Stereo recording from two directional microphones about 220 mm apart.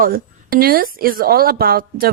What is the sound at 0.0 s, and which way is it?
A woman's voice, 40° right (ahead or behind).